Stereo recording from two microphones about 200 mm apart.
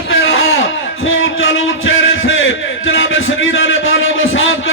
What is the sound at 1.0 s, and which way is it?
Heart murmur, 80° left.